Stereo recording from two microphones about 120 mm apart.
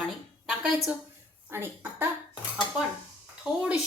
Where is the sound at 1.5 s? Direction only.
20° right (ahead or behind).